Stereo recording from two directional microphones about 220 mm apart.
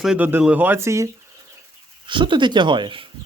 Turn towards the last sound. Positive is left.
turn(degrees=-20)  # may be behind; listen again after turning